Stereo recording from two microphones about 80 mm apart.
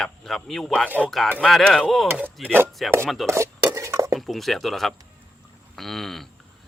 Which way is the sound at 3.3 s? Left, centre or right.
Right.